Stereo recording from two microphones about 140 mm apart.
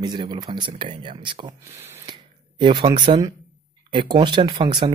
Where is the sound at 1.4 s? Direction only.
20° right (ahead or behind).